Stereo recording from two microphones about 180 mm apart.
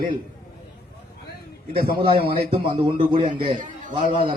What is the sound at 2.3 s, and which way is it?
Speech, 30° right (ahead or behind).